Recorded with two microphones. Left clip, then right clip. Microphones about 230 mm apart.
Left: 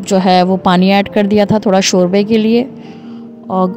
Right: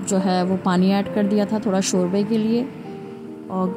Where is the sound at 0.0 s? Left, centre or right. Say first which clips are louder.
Left 11 dB; left.